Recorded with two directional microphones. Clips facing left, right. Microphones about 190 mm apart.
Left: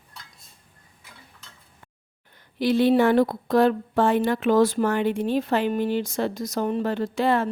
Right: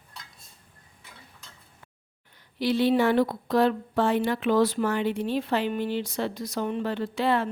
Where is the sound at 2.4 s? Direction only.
50° left (ahead or behind).